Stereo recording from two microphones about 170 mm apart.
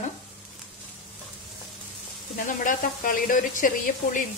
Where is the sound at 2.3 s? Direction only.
50° left (ahead or behind).